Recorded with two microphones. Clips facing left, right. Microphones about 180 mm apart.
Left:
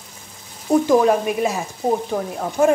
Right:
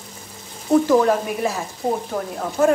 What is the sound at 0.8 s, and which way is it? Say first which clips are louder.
Speech: left 1 dB; 20° left (ahead or behind).